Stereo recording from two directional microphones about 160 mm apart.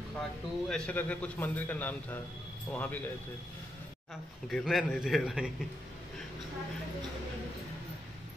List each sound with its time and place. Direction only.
0.2 s a man's voice: 5° left (ahead or behind)
4.5 s a man's voice: centre (ahead or behind)